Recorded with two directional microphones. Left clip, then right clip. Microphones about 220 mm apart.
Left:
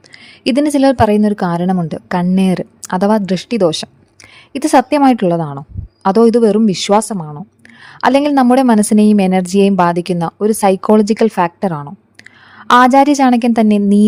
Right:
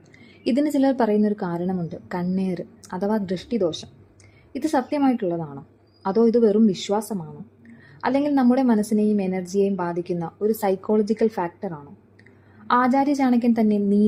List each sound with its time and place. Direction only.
0.4 s a woman's voice: 30° left (ahead or behind)